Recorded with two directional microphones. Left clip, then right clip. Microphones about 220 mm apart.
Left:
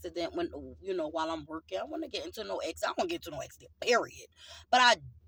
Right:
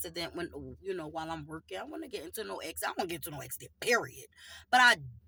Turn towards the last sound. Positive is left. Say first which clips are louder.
# even
turn(degrees=-10)  # may be behind; listen again after turning